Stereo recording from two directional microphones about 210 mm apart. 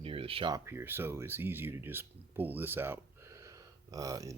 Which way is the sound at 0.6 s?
10° right (ahead or behind).